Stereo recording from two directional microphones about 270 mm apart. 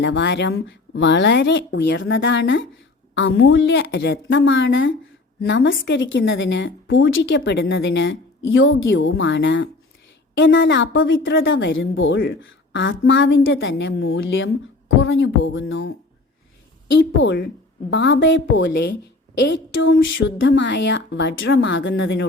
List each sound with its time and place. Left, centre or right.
0.0 s a woman's voice: left
17.1 s a woman's voice: left